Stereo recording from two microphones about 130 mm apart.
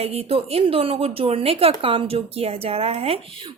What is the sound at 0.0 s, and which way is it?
Speech, 50° right (ahead or behind).